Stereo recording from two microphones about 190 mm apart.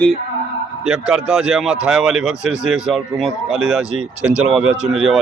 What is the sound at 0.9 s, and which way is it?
Speech, 5° right (ahead or behind).